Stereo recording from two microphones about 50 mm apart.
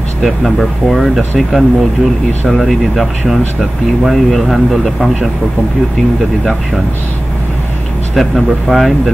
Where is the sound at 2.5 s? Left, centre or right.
Centre.